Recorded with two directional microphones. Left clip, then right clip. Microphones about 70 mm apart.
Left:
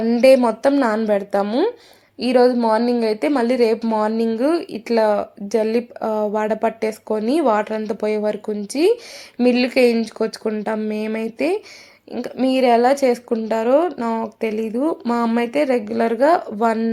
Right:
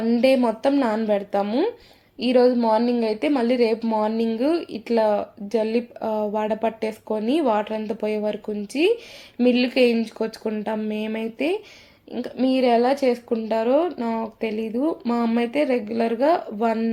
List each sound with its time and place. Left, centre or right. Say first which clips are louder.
0.0 s speech: left 6 dB; left